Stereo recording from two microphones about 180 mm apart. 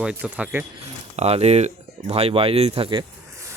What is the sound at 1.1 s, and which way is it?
Speech, 35° right (ahead or behind).